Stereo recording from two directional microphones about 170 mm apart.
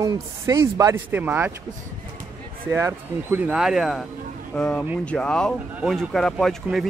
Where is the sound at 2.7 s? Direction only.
15° right (ahead or behind).